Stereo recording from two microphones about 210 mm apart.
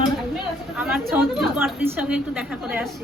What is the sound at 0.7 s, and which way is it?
A woman's voice, 5° right (ahead or behind).